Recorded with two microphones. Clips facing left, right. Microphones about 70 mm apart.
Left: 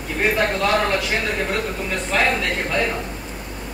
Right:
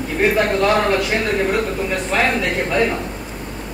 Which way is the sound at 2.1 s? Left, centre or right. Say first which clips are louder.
Right 1 dB; centre.